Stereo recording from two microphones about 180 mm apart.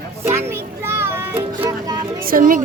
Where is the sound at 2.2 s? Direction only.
50° right (ahead or behind).